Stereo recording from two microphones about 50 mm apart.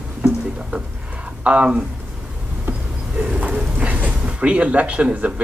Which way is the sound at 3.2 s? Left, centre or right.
Right.